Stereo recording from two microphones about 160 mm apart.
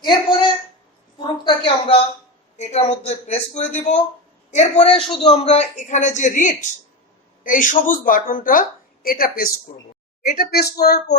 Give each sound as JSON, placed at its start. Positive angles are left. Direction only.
{"t": 0.0, "sound": "speech", "side_deg": 30}
{"t": 1.5, "sound": "a sound", "side_deg": 35}
{"t": 2.6, "sound": "a man's voice", "side_deg": 40}
{"t": 4.8, "sound": "a man's voice", "side_deg": 35}